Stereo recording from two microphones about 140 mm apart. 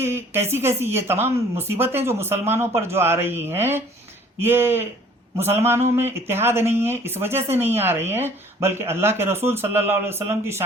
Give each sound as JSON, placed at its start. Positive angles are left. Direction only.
{"t": 0.0, "sound": "speech", "side_deg": -20}